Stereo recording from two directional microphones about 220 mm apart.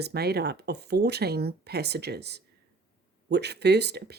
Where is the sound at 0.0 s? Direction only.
45° right (ahead or behind).